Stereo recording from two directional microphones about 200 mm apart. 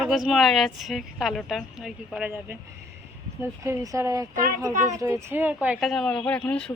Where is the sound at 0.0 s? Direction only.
Centre (ahead or behind).